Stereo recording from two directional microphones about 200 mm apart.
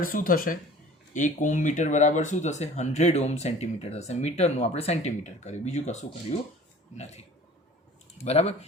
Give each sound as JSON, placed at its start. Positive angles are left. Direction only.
{"t": 0.0, "sound": "speech", "side_deg": 45}